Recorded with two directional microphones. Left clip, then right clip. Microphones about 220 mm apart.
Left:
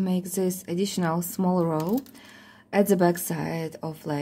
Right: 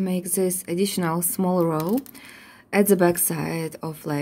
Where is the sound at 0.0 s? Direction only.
10° right (ahead or behind).